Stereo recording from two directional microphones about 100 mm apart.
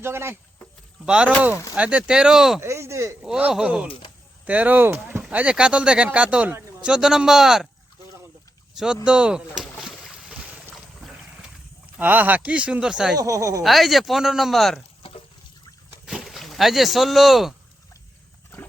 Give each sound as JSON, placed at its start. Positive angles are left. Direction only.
{"t": 0.0, "sound": "speech", "side_deg": -25}
{"t": 1.0, "sound": "speech", "side_deg": -10}
{"t": 2.6, "sound": "a sound", "side_deg": -30}
{"t": 3.2, "sound": "speech", "side_deg": -10}
{"t": 8.7, "sound": "boat", "side_deg": -5}
{"t": 9.0, "sound": "speech", "side_deg": -10}
{"t": 9.6, "sound": "boat", "side_deg": -5}
{"t": 11.9, "sound": "speech", "side_deg": -15}
{"t": 13.1, "sound": "speech", "side_deg": -35}
{"t": 13.6, "sound": "speech", "side_deg": 0}
{"t": 16.0, "sound": "speech", "side_deg": 0}